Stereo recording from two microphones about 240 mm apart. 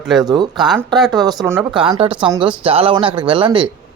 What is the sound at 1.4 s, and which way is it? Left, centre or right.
Speech, centre.